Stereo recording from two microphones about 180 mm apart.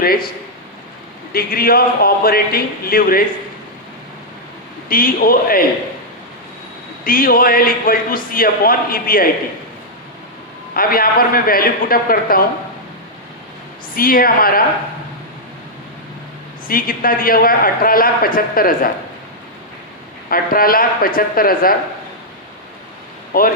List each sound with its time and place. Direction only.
0.0 s speech: 55° left (ahead or behind)
1.3 s speech: 55° left (ahead or behind)
4.9 s a man's voice: 55° left (ahead or behind)
7.0 s a man's voice: 55° left (ahead or behind)
10.8 s a man's voice: 55° left (ahead or behind)
13.9 s a man's voice: 55° left (ahead or behind)
16.6 s a man's voice: 55° left (ahead or behind)
20.3 s a man's voice: 55° left (ahead or behind)
23.3 s a man's voice: 55° left (ahead or behind)